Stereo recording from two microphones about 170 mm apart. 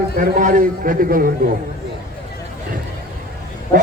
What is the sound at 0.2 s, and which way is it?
A man's voice, 50° right (ahead or behind).